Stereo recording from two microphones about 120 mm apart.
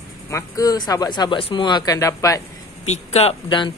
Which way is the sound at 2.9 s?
65° left (ahead or behind).